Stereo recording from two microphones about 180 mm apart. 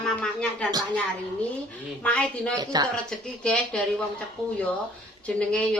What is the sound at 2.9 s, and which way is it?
Speech, 5° left (ahead or behind).